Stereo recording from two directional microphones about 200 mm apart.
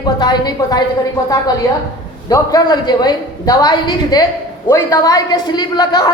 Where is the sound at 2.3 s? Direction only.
20° left (ahead or behind).